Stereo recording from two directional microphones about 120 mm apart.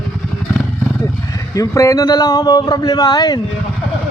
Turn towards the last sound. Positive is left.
turn(degrees=35)  # may be behind; listen again after turning